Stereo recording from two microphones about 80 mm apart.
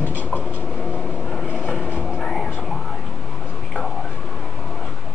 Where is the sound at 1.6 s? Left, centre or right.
Centre.